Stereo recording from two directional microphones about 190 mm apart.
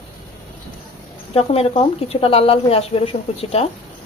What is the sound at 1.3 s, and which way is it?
Speech, 30° left (ahead or behind).